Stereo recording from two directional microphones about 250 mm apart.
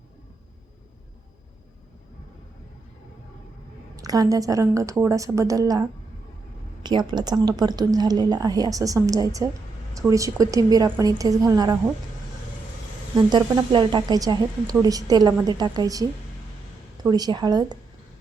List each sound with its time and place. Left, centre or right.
3.9 s a woman's voice: centre
6.8 s a woman's voice: centre
13.3 s a woman's voice: centre